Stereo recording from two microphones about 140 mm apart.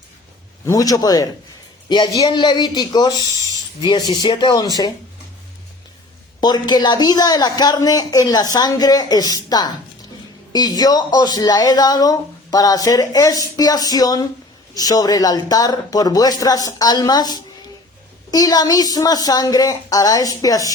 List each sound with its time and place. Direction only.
0.6 s speech: 25° left (ahead or behind)
6.4 s speech: 30° left (ahead or behind)